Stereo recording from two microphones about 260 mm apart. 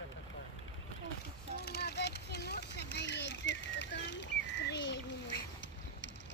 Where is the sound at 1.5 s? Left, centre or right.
Left.